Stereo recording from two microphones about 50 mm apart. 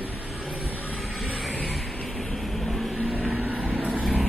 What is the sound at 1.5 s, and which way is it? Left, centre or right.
Vehicle, left.